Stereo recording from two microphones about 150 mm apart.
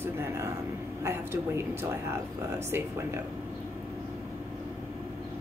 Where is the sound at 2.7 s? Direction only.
15° right (ahead or behind).